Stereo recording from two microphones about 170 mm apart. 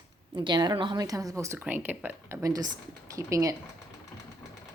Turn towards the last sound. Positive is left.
turn(degrees=-20)  # may be behind; listen again after turning